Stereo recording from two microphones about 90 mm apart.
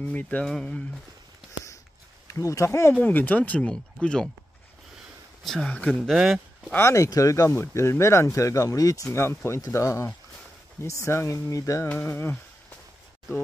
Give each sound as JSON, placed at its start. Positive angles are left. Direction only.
{"t": 0.0, "sound": "speech", "side_deg": 15}
{"t": 2.2, "sound": "speech", "side_deg": 35}
{"t": 2.9, "sound": "speech", "side_deg": 20}
{"t": 5.4, "sound": "speech", "side_deg": 5}
{"t": 5.7, "sound": "speech", "side_deg": 15}
{"t": 6.0, "sound": "speech", "side_deg": -5}
{"t": 6.7, "sound": "speech", "side_deg": 30}
{"t": 9.1, "sound": "speech", "side_deg": 30}
{"t": 11.9, "sound": "speech", "side_deg": 15}